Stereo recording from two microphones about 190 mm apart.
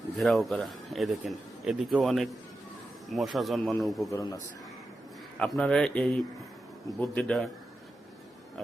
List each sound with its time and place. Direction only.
0.2 s speech: centre (ahead or behind)
4.1 s a man's voice: 20° left (ahead or behind)
5.4 s speech: 5° left (ahead or behind)